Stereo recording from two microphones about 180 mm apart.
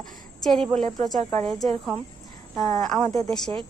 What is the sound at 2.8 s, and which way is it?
Speech, centre (ahead or behind).